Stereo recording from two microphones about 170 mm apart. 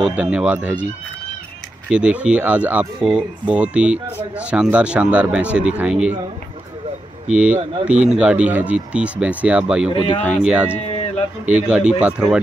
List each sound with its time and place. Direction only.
0.0 s speech: 5° right (ahead or behind)
1.9 s speech: 5° right (ahead or behind)
7.8 s speech: 5° right (ahead or behind)
10.9 s a sound: 35° left (ahead or behind)
11.4 s speech: 10° right (ahead or behind)